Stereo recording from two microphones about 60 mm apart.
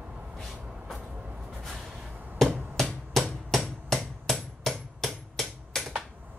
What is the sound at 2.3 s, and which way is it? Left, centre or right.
Hammer, centre.